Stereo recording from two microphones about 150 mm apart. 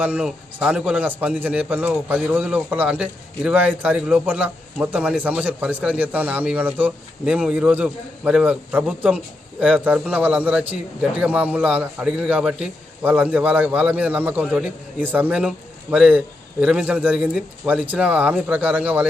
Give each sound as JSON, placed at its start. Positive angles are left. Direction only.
{"t": 0.0, "sound": "a man's voice", "side_deg": -10}